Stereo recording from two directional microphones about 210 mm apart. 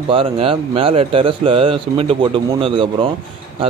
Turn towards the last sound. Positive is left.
turn(degrees=-25)  # may be behind; listen again after turning